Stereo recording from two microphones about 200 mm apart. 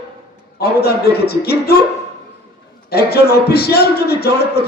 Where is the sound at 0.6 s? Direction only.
50° left (ahead or behind).